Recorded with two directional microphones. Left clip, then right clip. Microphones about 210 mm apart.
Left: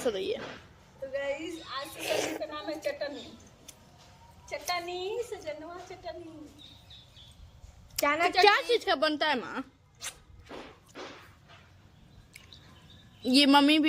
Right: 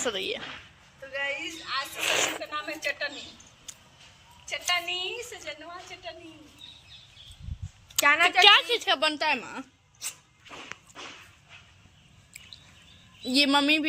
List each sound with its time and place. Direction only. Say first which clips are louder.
0.0 s a woman's voice: right 1 dB; 20° right (ahead or behind)
1.1 s a woman's voice: right 3 dB; 10° left (ahead or behind)
2.0 s a woman's voice: right 4 dB; 15° right (ahead or behind)
2.4 s a woman's voice: right 2 dB; 15° left (ahead or behind)
4.4 s a woman's voice: right 5 dB; 10° left (ahead or behind)
7.9 s a woman's voice: right 5 dB; 15° right (ahead or behind)
13.2 s speech: left 1 dB; 5° left (ahead or behind)